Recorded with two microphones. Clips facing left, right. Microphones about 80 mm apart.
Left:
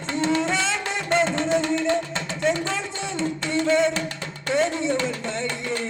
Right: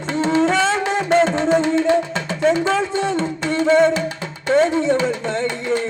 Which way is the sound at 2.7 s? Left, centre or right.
Right.